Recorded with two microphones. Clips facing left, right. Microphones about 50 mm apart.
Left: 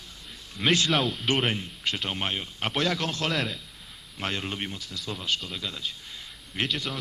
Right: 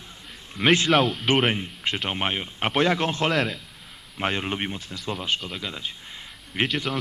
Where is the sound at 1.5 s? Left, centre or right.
Right.